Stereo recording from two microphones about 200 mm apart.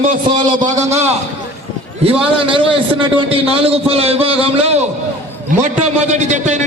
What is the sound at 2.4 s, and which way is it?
A man's voice, 25° right (ahead or behind).